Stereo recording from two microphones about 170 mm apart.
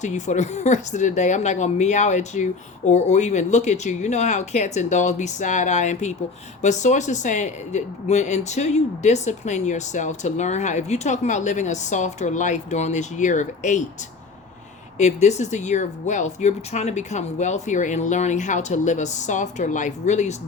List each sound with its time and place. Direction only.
0.0 s speech: 45° left (ahead or behind)
14.9 s speech: 40° left (ahead or behind)